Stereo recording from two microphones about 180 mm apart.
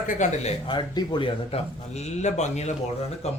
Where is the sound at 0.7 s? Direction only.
25° left (ahead or behind).